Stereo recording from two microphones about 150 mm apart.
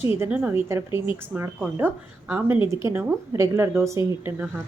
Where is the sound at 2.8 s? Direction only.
15° right (ahead or behind).